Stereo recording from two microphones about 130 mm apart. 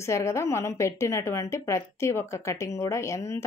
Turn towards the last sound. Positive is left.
turn(degrees=20)  # may be behind; listen again after turning